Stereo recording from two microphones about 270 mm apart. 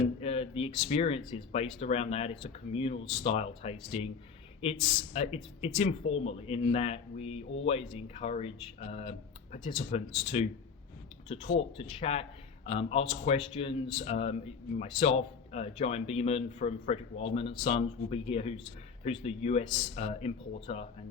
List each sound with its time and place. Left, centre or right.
0.2 s speech: left
11.5 s speech: left